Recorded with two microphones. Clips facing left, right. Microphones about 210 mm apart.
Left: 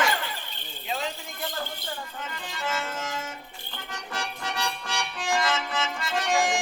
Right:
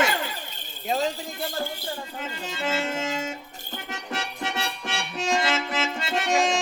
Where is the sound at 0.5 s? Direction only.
40° right (ahead or behind).